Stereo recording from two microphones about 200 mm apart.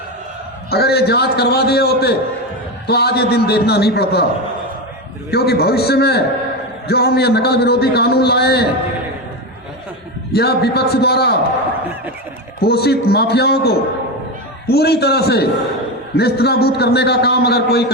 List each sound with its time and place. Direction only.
0.7 s a man's voice: 55° left (ahead or behind)
5.3 s a man's voice: 50° left (ahead or behind)
10.3 s a man's voice: 55° left (ahead or behind)
12.5 s a man's voice: 50° left (ahead or behind)